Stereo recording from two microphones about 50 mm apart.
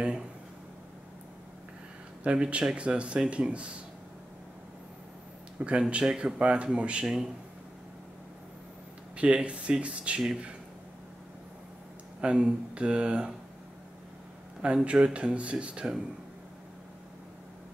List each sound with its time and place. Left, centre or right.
2.2 s speech: right
5.6 s speech: right
9.1 s speech: right
12.2 s speech: centre
14.6 s speech: right